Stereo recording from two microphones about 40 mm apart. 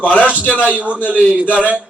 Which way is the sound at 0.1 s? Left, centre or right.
Left.